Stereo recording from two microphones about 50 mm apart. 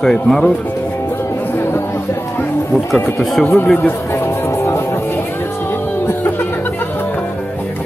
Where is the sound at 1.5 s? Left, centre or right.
Left.